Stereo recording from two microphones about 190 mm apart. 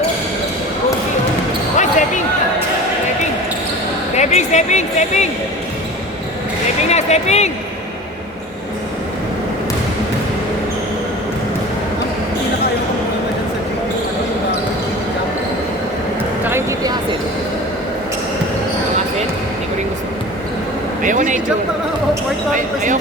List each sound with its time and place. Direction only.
1.8 s basketball bounce: 40° left (ahead or behind)
4.2 s speech: 35° left (ahead or behind)
6.9 s speech: 35° left (ahead or behind)
16.5 s a sound: 15° right (ahead or behind)
21.0 s speech: 45° right (ahead or behind)
22.5 s speech: 40° right (ahead or behind)